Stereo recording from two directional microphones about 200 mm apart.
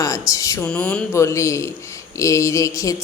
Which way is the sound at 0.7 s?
5° left (ahead or behind).